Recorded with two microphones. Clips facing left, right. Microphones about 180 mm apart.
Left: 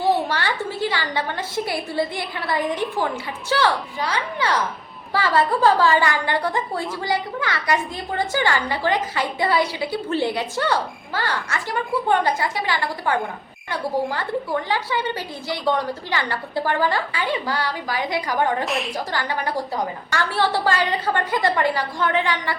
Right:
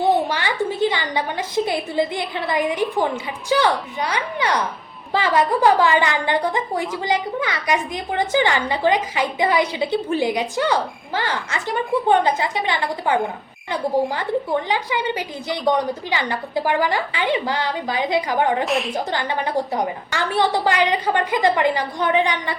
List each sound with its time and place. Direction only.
0.0 s a sound: centre (ahead or behind)
0.3 s a woman's voice: 15° right (ahead or behind)
18.6 s a woman's voice: centre (ahead or behind)
19.1 s a woman's voice: 20° right (ahead or behind)